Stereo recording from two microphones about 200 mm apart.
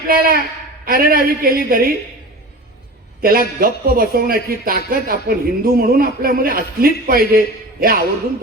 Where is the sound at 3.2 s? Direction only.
50° right (ahead or behind).